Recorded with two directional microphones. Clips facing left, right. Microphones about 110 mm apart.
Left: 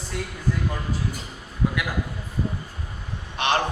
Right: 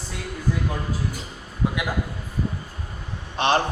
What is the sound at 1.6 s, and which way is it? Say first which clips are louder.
Speech: even; 20° right (ahead or behind).